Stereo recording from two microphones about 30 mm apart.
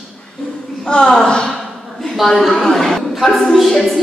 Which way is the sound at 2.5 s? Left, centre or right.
Centre.